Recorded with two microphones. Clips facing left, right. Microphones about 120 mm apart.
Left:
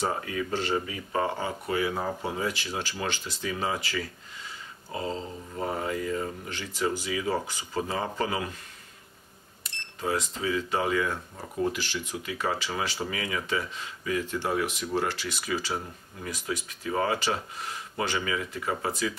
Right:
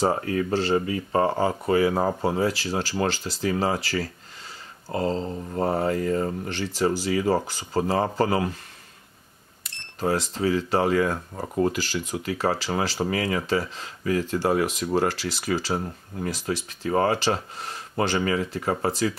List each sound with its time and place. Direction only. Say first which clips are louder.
0.0 s speech: right 6 dB; 40° right (ahead or behind)
0.5 s speech: right 6 dB; 30° right (ahead or behind)
10.3 s speech: right 6 dB; 35° right (ahead or behind)